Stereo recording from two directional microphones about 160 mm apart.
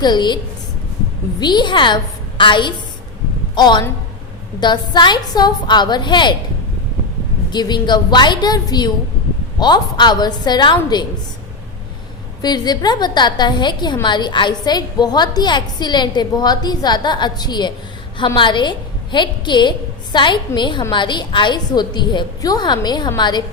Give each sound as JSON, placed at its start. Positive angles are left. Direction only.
{"t": 0.0, "sound": "a woman's voice", "side_deg": 25}
{"t": 1.4, "sound": "a woman's voice", "side_deg": 30}
{"t": 7.5, "sound": "a woman's voice", "side_deg": 25}
{"t": 12.4, "sound": "a woman's voice", "side_deg": 25}